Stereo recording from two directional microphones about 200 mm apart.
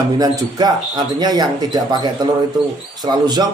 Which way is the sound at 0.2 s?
20° right (ahead or behind).